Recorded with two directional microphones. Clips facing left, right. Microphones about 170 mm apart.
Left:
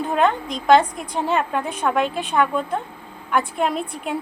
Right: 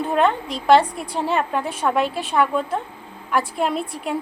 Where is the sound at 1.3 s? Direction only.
Centre (ahead or behind).